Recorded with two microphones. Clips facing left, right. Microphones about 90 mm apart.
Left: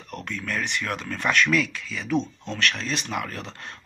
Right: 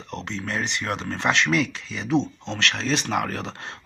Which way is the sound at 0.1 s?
25° right (ahead or behind).